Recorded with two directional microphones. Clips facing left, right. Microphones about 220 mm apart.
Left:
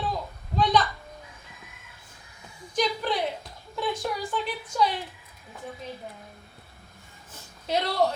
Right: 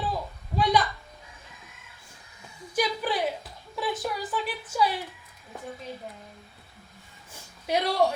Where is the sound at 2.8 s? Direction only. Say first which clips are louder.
Left 1 dB; 5° right (ahead or behind).